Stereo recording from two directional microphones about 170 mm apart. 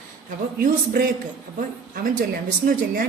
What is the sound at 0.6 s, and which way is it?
Speech, 55° right (ahead or behind).